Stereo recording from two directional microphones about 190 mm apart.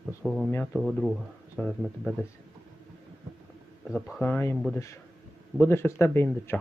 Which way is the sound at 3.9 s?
5° left (ahead or behind).